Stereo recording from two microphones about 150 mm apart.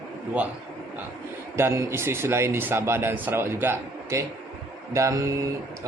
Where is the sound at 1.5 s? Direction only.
15° right (ahead or behind).